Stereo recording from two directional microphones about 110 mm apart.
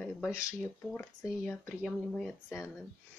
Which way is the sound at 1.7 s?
5° left (ahead or behind).